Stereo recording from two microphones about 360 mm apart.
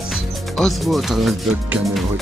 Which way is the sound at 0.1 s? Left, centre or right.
Centre.